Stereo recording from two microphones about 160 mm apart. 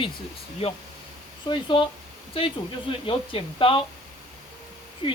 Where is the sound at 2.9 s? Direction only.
35° left (ahead or behind).